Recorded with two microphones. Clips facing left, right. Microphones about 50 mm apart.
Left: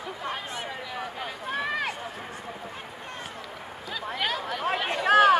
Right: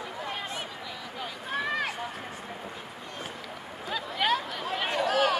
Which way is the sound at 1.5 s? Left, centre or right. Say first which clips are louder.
Left 1 dB; centre.